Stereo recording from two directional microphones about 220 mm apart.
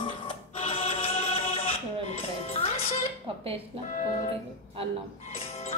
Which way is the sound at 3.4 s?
25° right (ahead or behind).